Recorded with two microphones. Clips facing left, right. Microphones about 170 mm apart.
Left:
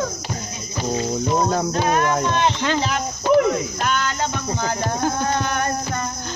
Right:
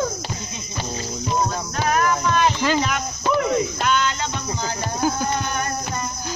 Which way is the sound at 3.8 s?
45° left (ahead or behind).